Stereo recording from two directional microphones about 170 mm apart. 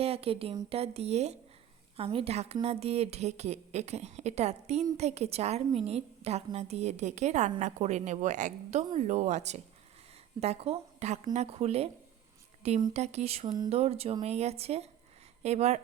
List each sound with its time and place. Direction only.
0.0 s a woman's voice: 35° right (ahead or behind)
12.9 s a woman's voice: 40° right (ahead or behind)